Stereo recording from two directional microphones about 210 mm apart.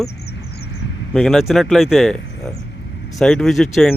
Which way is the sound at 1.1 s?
Centre (ahead or behind).